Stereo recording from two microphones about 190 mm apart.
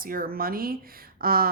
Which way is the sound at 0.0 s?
50° right (ahead or behind).